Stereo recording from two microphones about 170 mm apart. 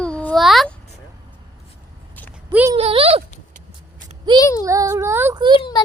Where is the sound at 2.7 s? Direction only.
35° right (ahead or behind).